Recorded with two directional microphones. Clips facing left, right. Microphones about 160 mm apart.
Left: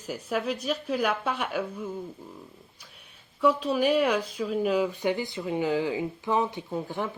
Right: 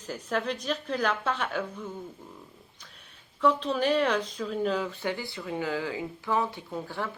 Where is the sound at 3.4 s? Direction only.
10° left (ahead or behind).